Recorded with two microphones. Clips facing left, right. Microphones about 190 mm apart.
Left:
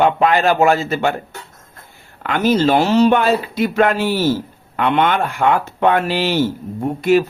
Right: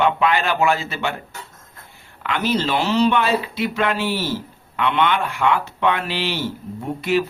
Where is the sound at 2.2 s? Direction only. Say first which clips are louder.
Left 6 dB; 45° left (ahead or behind).